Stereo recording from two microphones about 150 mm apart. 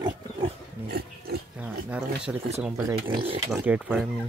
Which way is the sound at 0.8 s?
90° right.